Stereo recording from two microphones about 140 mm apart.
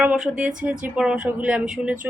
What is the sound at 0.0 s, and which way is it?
Speech, 10° right (ahead or behind).